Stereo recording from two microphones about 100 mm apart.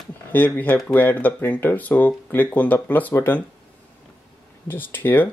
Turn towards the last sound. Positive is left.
turn(degrees=20)  # may be behind; listen again after turning